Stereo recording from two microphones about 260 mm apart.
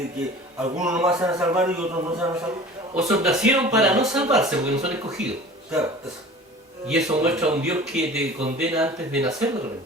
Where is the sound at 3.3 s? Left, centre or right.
Centre.